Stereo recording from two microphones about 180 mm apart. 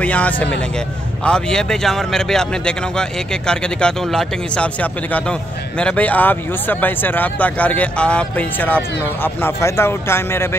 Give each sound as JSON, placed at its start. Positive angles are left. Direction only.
{"t": 0.0, "sound": "speech", "side_deg": 10}
{"t": 5.8, "sound": "speech", "side_deg": 5}